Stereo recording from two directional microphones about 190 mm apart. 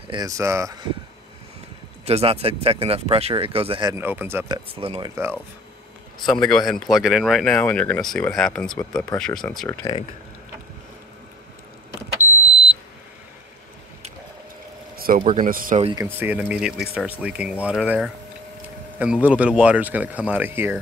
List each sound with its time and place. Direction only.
0.1 s speech: 20° right (ahead or behind)
2.0 s speech: 35° right (ahead or behind)
3.9 s speech: 10° right (ahead or behind)
4.6 s speech: 30° right (ahead or behind)
5.1 s speech: 10° right (ahead or behind)
6.2 s speech: centre (ahead or behind)
15.0 s speech: 45° right (ahead or behind)
15.8 s speech: 20° right (ahead or behind)
16.1 s speech: 10° right (ahead or behind)